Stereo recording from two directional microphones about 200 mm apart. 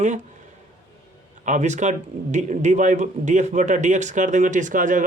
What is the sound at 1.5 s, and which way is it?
Speech, 35° right (ahead or behind).